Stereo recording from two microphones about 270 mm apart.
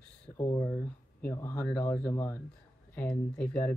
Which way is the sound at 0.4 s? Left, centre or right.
Centre.